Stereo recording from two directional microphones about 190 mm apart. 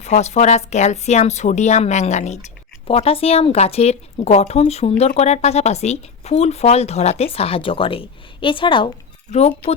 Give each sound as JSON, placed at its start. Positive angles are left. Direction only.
{"t": 0.0, "sound": "a woman's voice", "side_deg": 35}